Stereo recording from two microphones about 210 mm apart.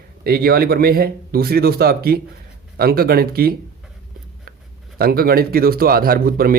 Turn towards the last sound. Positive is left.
turn(degrees=-45)  # may be behind; listen again after turning